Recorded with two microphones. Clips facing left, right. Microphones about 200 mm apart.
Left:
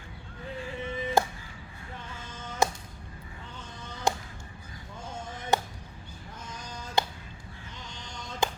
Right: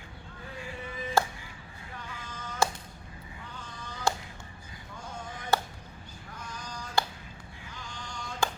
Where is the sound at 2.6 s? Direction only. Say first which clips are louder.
Left 2 dB; 20° left (ahead or behind).